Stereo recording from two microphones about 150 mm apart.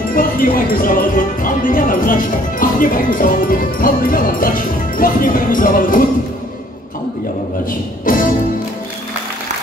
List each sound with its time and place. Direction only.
0.1 s music: 70° left (ahead or behind)
8.0 s music: 65° left (ahead or behind)